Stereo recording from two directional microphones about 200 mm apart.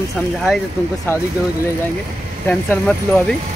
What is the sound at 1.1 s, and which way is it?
Speech, 10° left (ahead or behind).